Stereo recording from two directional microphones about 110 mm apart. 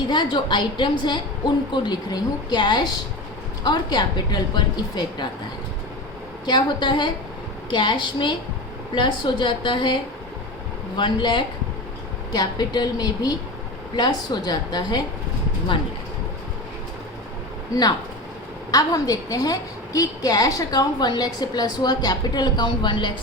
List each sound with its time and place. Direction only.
0.1 s a woman's voice: 45° left (ahead or behind)
6.4 s a woman's voice: 45° left (ahead or behind)
18.7 s a woman's voice: 35° left (ahead or behind)